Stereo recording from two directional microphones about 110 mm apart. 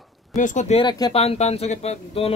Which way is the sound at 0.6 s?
90° left.